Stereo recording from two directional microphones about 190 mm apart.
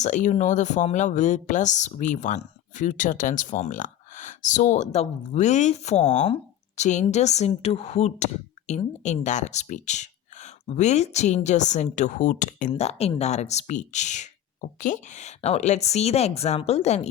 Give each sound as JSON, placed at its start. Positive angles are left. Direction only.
{"t": 0.0, "sound": "speech", "side_deg": 40}